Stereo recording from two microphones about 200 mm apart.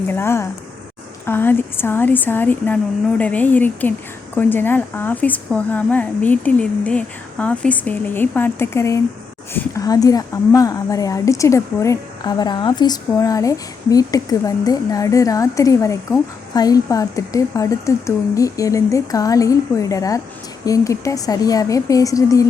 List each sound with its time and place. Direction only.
0.1 s a woman's voice: 10° left (ahead or behind)